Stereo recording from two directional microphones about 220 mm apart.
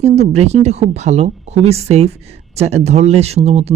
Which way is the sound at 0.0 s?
30° right (ahead or behind).